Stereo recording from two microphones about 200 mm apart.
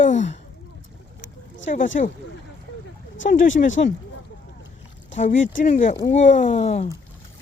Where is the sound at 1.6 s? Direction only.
40° left (ahead or behind).